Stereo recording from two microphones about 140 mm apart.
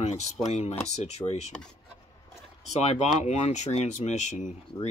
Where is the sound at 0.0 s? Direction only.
50° left (ahead or behind).